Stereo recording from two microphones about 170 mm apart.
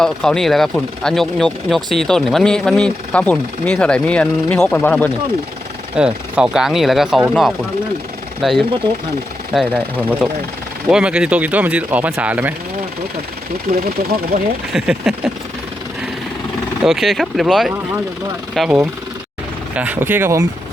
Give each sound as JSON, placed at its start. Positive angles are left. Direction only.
{"t": 0.0, "sound": "speech", "side_deg": 5}
{"t": 6.0, "sound": "speech", "side_deg": -5}
{"t": 8.4, "sound": "speech", "side_deg": 0}
{"t": 14.3, "sound": "speech", "side_deg": -70}
{"t": 14.7, "sound": "speech", "side_deg": 0}
{"t": 16.8, "sound": "speech", "side_deg": 0}